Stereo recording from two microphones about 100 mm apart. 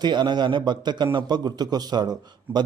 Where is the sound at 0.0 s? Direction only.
50° right (ahead or behind).